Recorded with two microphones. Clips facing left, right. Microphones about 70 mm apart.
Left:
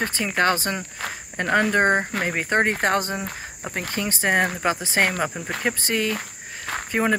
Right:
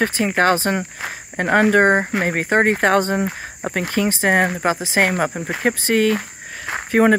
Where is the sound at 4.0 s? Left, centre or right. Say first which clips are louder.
Right 8 dB; right.